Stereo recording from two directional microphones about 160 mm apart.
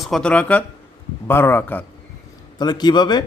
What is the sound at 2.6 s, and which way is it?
Speech, 25° left (ahead or behind).